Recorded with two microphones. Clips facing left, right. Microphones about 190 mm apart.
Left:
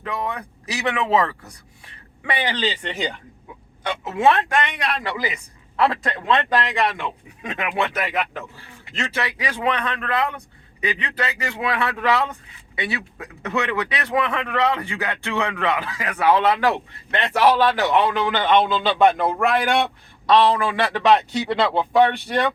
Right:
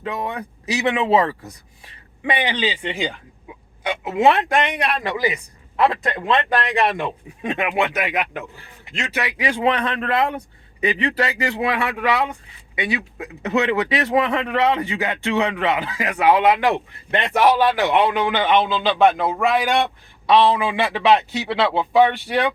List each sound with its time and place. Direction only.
0.0 s a man's voice: 25° right (ahead or behind)
6.9 s a man's voice: 25° right (ahead or behind)
9.4 s a man's voice: 25° right (ahead or behind)
11.8 s a man's voice: 10° right (ahead or behind)